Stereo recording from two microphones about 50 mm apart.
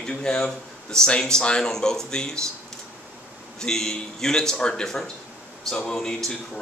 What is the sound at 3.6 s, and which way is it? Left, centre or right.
Speech, centre.